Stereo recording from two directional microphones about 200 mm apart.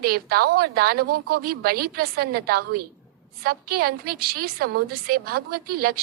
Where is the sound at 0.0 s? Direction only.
50° right (ahead or behind).